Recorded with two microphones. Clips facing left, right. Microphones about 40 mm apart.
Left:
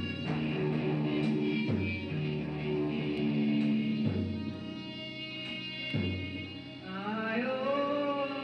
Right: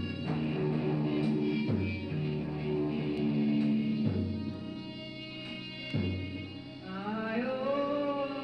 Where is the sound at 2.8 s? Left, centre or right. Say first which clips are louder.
Even; left.